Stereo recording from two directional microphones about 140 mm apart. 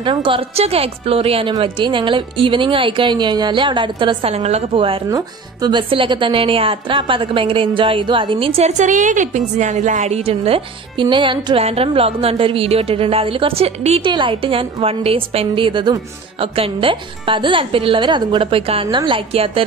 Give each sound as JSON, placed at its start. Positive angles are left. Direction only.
{"t": 0.0, "sound": "a woman's voice", "side_deg": -35}
{"t": 5.1, "sound": "speech", "side_deg": -30}